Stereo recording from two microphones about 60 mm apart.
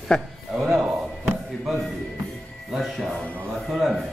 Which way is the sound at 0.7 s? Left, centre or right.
Centre.